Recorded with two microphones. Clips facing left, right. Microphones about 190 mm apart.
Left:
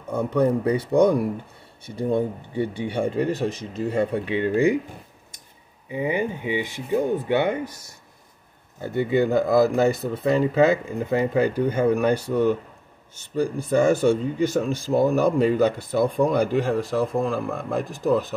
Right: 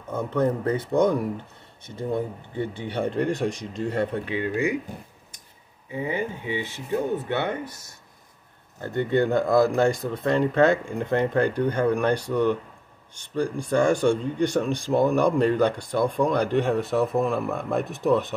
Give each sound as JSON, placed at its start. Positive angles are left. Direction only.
{"t": 0.1, "sound": "speech", "side_deg": 10}
{"t": 4.3, "sound": "speech", "side_deg": 30}
{"t": 5.9, "sound": "speech", "side_deg": 15}